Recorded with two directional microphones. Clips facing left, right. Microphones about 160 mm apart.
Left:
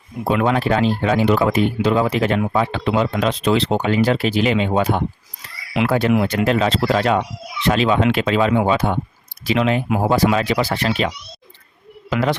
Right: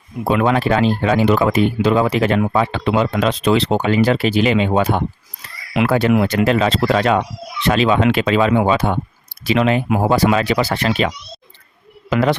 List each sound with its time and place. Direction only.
0.3 s speech: 80° right
5.7 s speech: 65° right (ahead or behind); by 9.0 s 80° right
9.5 s speech: 70° right (ahead or behind)
12.1 s a man's voice: 60° right (ahead or behind)